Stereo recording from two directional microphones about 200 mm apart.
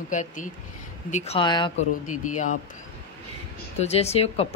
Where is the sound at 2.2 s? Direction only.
40° left (ahead or behind).